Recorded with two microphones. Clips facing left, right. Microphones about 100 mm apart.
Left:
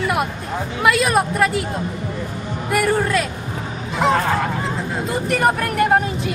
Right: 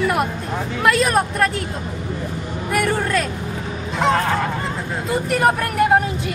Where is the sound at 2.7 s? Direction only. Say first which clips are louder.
Left 2 dB; 5° left (ahead or behind).